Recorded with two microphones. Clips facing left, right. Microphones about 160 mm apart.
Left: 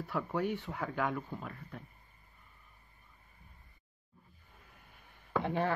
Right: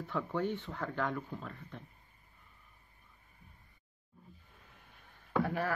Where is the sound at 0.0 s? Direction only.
10° left (ahead or behind).